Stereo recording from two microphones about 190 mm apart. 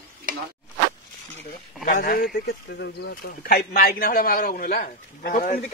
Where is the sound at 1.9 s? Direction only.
50° left (ahead or behind).